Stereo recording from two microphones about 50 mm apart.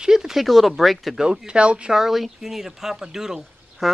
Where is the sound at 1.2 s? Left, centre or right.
Right.